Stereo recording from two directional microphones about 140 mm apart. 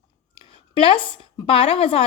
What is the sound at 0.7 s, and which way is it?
A woman's voice, 35° left (ahead or behind).